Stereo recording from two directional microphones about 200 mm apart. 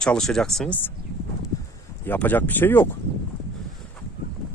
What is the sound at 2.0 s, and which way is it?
Speech, 10° left (ahead or behind).